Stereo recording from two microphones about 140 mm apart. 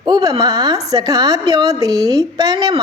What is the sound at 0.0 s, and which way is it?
A woman's voice, 30° right (ahead or behind).